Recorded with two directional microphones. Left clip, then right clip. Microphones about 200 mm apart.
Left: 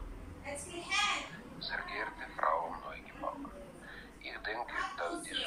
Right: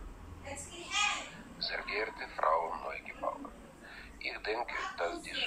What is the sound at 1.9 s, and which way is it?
Speech, 20° right (ahead or behind).